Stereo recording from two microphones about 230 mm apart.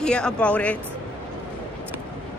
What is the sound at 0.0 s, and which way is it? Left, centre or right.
Speech, centre.